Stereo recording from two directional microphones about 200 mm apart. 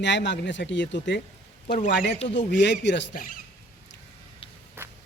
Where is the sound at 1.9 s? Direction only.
60° left (ahead or behind).